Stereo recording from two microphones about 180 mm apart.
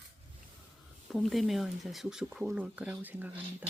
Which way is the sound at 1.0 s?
Centre (ahead or behind).